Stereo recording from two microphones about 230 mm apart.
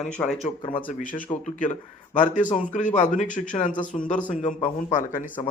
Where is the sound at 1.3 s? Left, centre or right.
Left.